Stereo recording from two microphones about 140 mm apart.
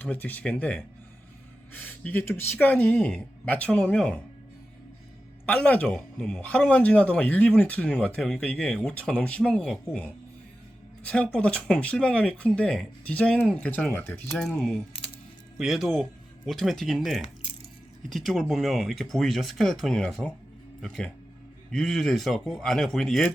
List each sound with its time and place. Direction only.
0.0 s speech: 10° left (ahead or behind)
5.5 s speech: 10° left (ahead or behind)
14.4 s speech: 5° left (ahead or behind)
14.9 s coin: 40° left (ahead or behind)
15.5 s speech: centre (ahead or behind)